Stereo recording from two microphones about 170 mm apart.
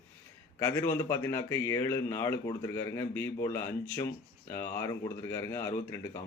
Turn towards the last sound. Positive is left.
turn(degrees=15)  # may be behind; listen again after turning